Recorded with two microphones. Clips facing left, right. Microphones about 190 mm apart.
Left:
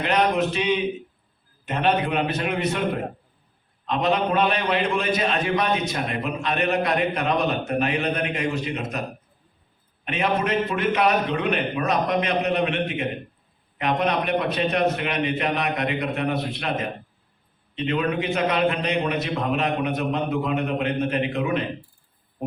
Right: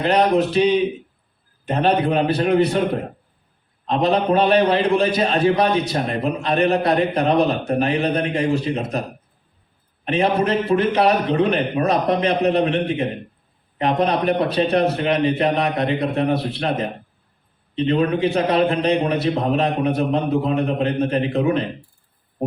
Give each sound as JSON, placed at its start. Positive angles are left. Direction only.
{"t": 0.0, "sound": "a man's voice", "side_deg": -35}